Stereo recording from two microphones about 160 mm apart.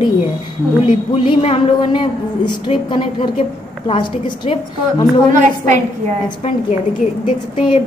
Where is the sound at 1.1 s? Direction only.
40° left (ahead or behind).